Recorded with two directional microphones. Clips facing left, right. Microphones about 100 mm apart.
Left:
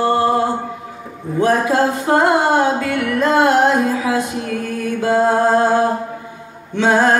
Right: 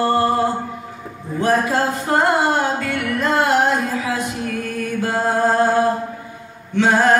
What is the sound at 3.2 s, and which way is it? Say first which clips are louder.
Music: left 4 dB; 25° left (ahead or behind).